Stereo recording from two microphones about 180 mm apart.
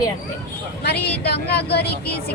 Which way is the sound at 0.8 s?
65° left (ahead or behind).